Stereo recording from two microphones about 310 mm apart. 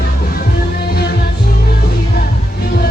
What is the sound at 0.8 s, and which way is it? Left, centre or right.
Music, left.